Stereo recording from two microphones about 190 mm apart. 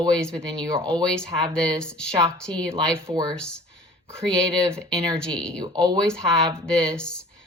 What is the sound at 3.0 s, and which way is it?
Speech, 20° right (ahead or behind).